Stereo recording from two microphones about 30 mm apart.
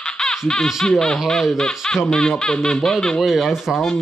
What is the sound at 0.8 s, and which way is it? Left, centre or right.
Speech, centre.